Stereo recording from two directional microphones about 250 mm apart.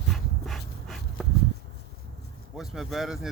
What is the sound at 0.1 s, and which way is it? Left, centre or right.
Dog, centre.